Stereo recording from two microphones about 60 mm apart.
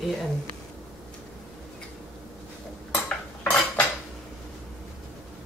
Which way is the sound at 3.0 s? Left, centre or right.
Left.